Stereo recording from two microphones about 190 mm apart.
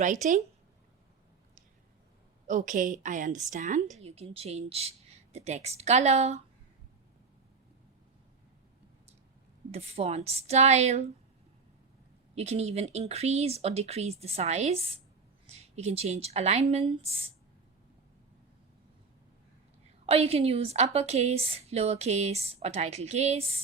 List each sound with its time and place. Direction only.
0.0 s a woman's voice: 40° right (ahead or behind)
2.5 s a woman's voice: 45° right (ahead or behind)
9.7 s a woman's voice: 35° right (ahead or behind)
12.3 s a woman's voice: 35° right (ahead or behind)
20.1 s a woman's voice: 30° right (ahead or behind)